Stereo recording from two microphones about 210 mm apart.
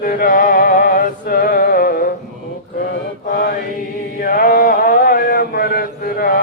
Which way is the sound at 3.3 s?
45° left (ahead or behind).